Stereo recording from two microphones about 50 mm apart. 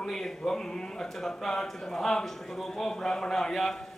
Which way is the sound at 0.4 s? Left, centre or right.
Centre.